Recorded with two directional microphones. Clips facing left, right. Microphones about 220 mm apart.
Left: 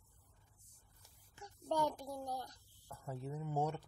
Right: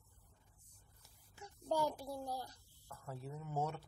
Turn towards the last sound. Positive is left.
turn(degrees=15)  # may be behind; listen again after turning